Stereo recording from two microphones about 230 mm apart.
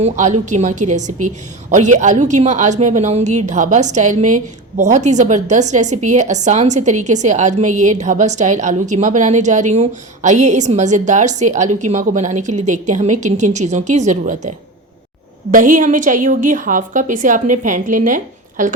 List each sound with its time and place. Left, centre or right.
0.0 s a woman's voice: right
15.5 s a woman's voice: right